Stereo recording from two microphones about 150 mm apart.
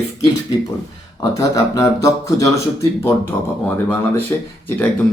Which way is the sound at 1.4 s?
20° left (ahead or behind).